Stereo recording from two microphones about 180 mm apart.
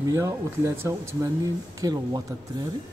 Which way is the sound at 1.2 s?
20° right (ahead or behind).